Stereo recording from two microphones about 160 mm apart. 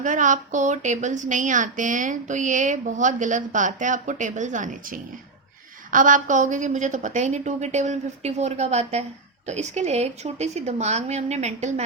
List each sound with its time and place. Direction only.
0.0 s a woman's voice: 50° right (ahead or behind)